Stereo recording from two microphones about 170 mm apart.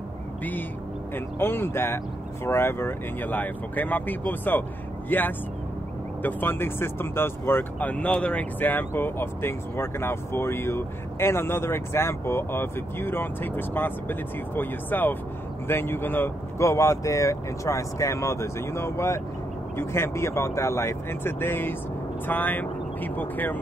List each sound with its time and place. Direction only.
0.4 s speech: 10° left (ahead or behind)